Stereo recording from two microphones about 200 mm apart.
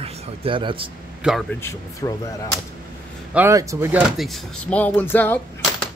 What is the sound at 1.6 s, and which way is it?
Speech, 15° left (ahead or behind).